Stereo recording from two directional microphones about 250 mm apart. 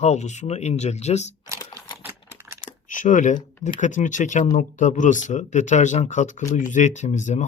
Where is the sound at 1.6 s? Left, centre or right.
Centre.